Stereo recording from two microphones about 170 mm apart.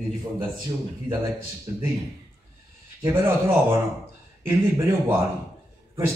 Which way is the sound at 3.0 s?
15° right (ahead or behind).